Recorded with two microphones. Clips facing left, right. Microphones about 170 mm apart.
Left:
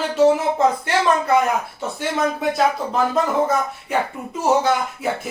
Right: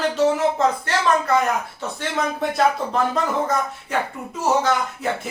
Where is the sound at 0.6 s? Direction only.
15° left (ahead or behind).